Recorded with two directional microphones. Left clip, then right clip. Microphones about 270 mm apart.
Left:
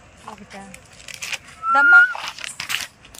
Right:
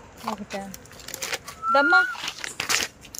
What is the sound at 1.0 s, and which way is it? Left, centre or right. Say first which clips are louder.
Vehicle: left 2 dB; centre.